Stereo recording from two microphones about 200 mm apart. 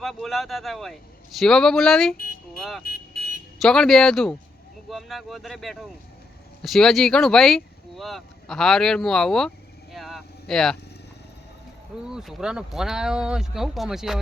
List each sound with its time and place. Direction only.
0.0 s speech: centre (ahead or behind)
2.8 s vehicle: 50° left (ahead or behind)
3.6 s speech: centre (ahead or behind)
9.9 s vehicle: centre (ahead or behind)
12.0 s speech: 5° right (ahead or behind)